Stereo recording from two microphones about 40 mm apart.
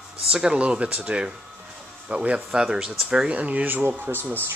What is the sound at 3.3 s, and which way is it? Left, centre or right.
Speech, right.